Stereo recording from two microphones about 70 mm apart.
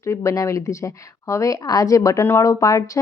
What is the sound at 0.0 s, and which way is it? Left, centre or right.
Speech, left.